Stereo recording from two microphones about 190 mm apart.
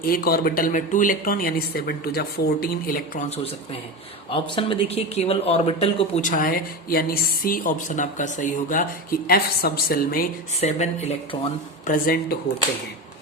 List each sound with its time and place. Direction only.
0.0 s speech: 50° left (ahead or behind)
3.2 s speech: 30° left (ahead or behind); by 10.2 s 50° left (ahead or behind)
10.6 s speech: 35° left (ahead or behind)
11.9 s speech: 50° left (ahead or behind)